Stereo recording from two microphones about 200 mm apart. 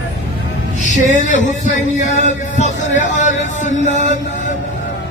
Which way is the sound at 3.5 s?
35° left (ahead or behind).